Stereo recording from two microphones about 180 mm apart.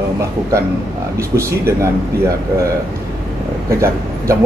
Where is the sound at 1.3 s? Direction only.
15° right (ahead or behind).